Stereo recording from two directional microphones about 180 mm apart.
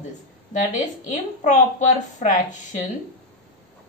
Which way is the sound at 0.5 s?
45° left (ahead or behind).